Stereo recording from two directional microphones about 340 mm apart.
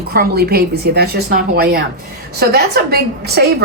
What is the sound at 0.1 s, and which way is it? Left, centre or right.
A woman's voice, right.